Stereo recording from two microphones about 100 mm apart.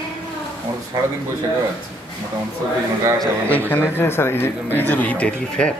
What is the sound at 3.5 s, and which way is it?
Speech, 20° left (ahead or behind).